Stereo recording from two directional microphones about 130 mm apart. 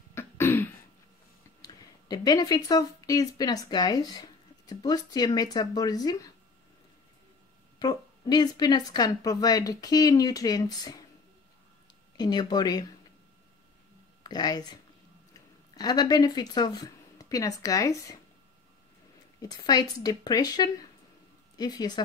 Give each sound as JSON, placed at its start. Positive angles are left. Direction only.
{"t": 0.1, "sound": "throat clearing", "side_deg": 20}
{"t": 1.6, "sound": "speech", "side_deg": 30}
{"t": 7.8, "sound": "speech", "side_deg": 30}
{"t": 12.2, "sound": "speech", "side_deg": 30}
{"t": 14.2, "sound": "speech", "side_deg": 30}
{"t": 19.4, "sound": "speech", "side_deg": 30}